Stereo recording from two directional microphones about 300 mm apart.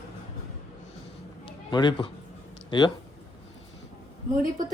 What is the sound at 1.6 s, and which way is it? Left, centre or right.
A man's voice, centre.